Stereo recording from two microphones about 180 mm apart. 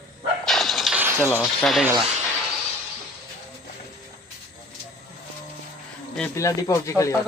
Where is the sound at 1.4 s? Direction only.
Centre (ahead or behind).